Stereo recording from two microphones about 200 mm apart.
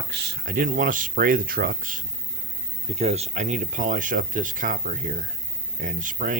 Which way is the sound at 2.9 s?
30° right (ahead or behind).